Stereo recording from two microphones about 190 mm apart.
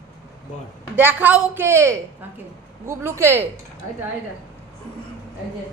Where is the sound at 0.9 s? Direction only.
10° right (ahead or behind).